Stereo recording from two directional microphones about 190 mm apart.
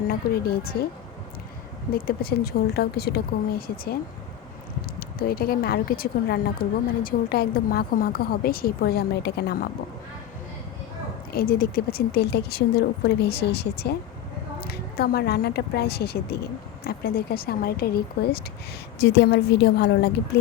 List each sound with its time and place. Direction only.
0.6 s a woman's voice: 50° left (ahead or behind)
1.9 s a woman's voice: 50° left (ahead or behind)
4.9 s a woman's voice: 55° left (ahead or behind)
11.3 s a woman's voice: 50° left (ahead or behind)